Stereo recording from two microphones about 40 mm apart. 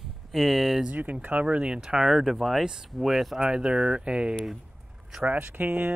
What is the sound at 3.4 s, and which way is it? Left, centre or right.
Speech, right.